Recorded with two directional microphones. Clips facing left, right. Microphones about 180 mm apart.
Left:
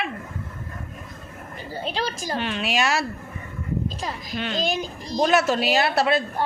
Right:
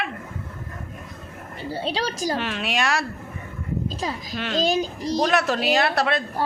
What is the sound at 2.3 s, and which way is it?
Speech, centre (ahead or behind).